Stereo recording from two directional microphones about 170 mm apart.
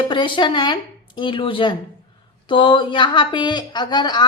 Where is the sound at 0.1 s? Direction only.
30° left (ahead or behind).